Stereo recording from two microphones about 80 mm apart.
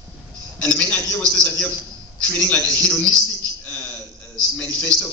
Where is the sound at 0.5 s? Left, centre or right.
Centre.